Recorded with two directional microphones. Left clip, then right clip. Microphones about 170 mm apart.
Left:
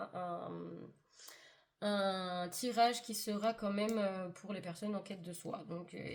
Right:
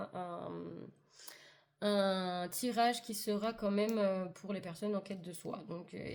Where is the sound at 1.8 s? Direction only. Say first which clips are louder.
Right 3 dB; 45° right (ahead or behind).